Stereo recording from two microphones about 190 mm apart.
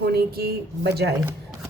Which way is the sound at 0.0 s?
55° right (ahead or behind).